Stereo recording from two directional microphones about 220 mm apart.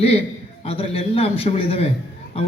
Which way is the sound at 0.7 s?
25° left (ahead or behind).